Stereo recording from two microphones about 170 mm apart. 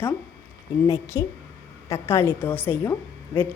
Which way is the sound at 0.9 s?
15° left (ahead or behind).